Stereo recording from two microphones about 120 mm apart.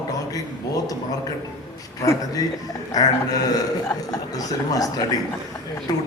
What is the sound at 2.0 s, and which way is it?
Speech, 30° left (ahead or behind).